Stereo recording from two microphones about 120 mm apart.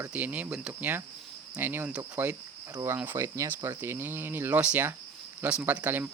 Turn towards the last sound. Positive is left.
turn(degrees=-15)  # may be behind; listen again after turning